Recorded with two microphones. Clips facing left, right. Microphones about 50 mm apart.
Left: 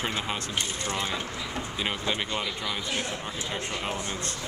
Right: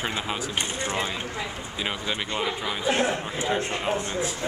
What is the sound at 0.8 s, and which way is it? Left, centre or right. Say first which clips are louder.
Speech: right 5 dB; right.